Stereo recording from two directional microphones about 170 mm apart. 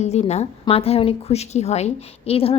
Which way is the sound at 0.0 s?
40° left (ahead or behind).